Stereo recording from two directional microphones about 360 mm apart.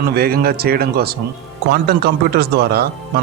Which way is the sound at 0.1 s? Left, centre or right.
Right.